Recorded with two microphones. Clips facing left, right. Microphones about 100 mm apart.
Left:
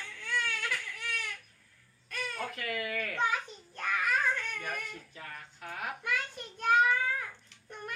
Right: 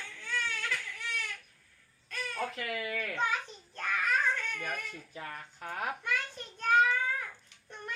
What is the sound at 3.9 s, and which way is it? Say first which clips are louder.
Babbling: left 1 dB; 10° left (ahead or behind).